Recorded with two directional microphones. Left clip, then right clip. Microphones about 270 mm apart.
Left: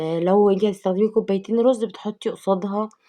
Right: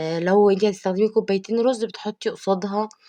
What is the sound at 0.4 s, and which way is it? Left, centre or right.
Speech, right.